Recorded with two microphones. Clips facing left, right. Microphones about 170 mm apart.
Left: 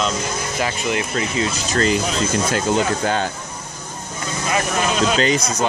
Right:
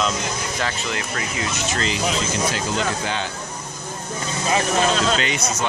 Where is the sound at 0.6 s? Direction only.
15° left (ahead or behind).